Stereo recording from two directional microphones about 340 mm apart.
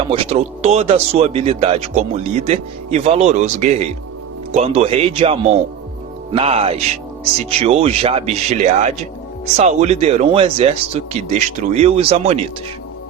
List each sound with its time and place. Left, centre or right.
0.0 s speech: centre